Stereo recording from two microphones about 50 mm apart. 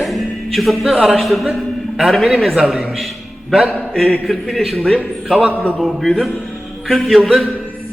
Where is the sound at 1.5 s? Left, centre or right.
Centre.